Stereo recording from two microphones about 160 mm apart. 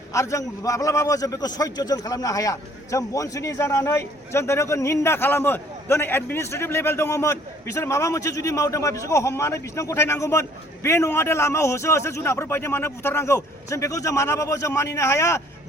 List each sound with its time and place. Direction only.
0.1 s a man's voice: 20° left (ahead or behind)